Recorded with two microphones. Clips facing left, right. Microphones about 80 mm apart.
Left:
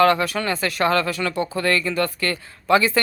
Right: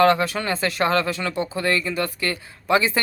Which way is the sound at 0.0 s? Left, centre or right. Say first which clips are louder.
Even; right.